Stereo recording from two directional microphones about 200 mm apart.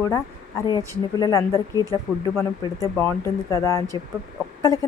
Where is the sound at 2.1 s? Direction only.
5° right (ahead or behind).